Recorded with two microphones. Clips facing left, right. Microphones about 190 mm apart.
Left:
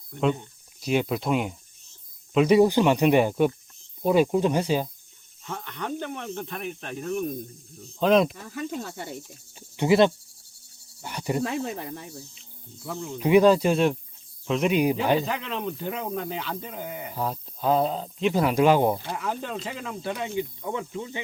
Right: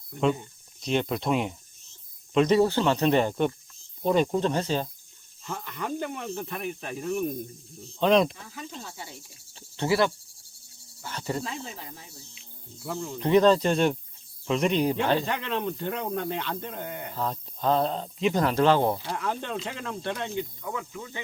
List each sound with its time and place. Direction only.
0.1 s speech: centre (ahead or behind)
5.4 s speech: centre (ahead or behind)
8.8 s speech: 55° left (ahead or behind)
9.6 s speech: 15° left (ahead or behind)
11.4 s speech: 60° left (ahead or behind)
12.8 s speech: centre (ahead or behind)
20.6 s snake: 25° left (ahead or behind)